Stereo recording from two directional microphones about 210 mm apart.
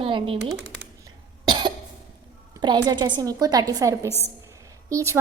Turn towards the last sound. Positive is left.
turn(degrees=-15)  # may be behind; listen again after turning